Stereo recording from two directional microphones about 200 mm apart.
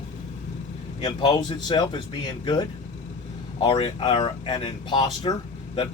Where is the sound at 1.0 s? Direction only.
20° left (ahead or behind).